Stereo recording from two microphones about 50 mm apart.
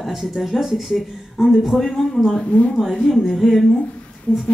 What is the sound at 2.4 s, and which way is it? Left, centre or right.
Speech, left.